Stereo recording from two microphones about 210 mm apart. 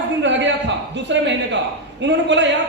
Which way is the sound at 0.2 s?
60° right (ahead or behind).